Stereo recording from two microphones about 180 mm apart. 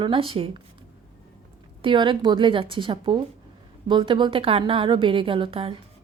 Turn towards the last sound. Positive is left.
turn(degrees=-30)  # may be behind; listen again after turning